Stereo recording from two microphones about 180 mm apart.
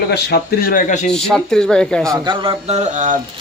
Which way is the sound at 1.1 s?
5° left (ahead or behind).